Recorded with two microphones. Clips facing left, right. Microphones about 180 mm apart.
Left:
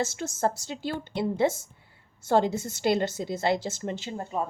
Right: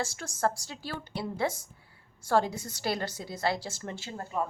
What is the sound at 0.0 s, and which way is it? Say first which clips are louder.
A woman's voice: left 3 dB; 25° left (ahead or behind).